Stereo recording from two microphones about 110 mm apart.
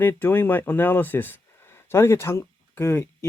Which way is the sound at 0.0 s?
20° left (ahead or behind).